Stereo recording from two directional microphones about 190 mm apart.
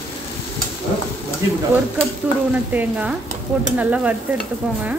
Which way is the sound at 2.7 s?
10° right (ahead or behind).